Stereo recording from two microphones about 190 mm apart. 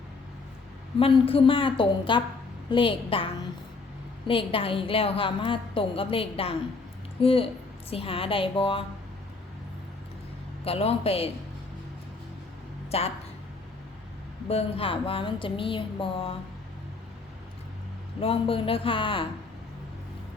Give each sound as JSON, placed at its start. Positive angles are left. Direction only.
{"t": 0.9, "sound": "a woman's voice", "side_deg": 30}
{"t": 4.3, "sound": "a woman's voice", "side_deg": 30}
{"t": 10.6, "sound": "a man's voice", "side_deg": 30}
{"t": 12.9, "sound": "a man's voice", "side_deg": 30}
{"t": 14.4, "sound": "a woman's voice", "side_deg": 30}
{"t": 18.2, "sound": "a woman's voice", "side_deg": 30}